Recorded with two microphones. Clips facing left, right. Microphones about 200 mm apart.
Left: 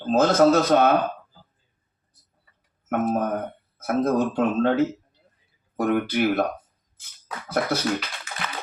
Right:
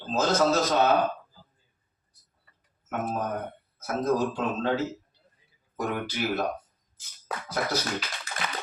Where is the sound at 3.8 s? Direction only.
60° left (ahead or behind).